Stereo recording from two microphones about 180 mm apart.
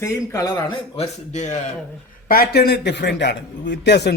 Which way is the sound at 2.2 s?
55° left (ahead or behind).